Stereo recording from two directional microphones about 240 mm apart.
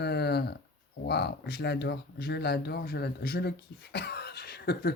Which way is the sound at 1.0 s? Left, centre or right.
Left.